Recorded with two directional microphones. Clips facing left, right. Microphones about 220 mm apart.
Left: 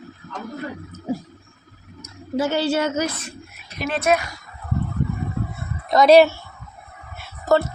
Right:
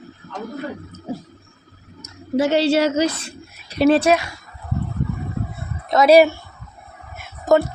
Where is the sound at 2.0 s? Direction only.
70° right (ahead or behind).